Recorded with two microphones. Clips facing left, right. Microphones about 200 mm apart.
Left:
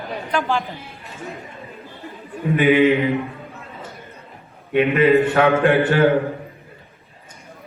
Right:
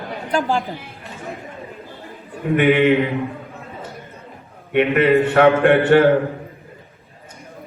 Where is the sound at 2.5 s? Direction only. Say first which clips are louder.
Even; 65° right (ahead or behind).